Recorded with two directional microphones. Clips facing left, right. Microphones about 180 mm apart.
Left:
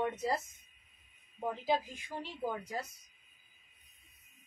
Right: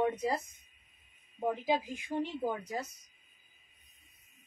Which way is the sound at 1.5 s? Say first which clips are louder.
Even; 15° right (ahead or behind).